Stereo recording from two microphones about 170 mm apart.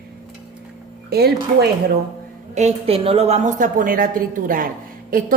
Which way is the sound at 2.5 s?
40° right (ahead or behind).